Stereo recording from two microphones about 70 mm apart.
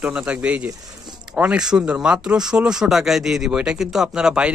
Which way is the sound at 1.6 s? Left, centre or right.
Centre.